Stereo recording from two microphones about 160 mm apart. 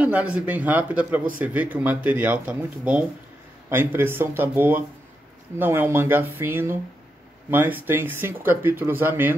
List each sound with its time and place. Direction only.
0.0 s speech: 10° right (ahead or behind)